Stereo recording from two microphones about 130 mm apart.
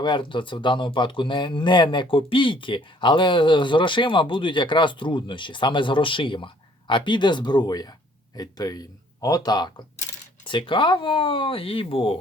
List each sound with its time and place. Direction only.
0.0 s speech: 40° left (ahead or behind)